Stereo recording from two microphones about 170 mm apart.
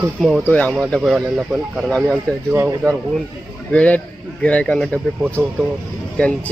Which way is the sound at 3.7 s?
5° left (ahead or behind).